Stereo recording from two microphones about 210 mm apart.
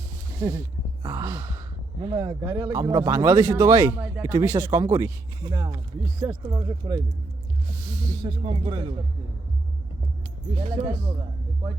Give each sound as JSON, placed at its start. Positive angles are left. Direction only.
{"t": 0.3, "sound": "a sound", "side_deg": -15}
{"t": 1.0, "sound": "speech", "side_deg": -15}
{"t": 8.2, "sound": "speech", "side_deg": -20}
{"t": 10.5, "sound": "speech", "side_deg": -25}